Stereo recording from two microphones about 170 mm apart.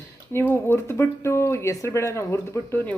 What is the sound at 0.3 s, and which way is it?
A woman's voice, 15° left (ahead or behind).